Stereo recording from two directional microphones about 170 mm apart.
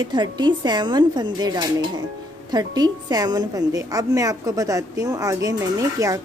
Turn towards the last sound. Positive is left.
turn(degrees=-20)  # may be behind; listen again after turning